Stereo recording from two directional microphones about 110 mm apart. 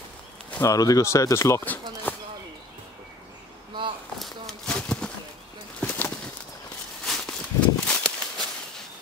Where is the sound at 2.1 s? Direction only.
15° left (ahead or behind).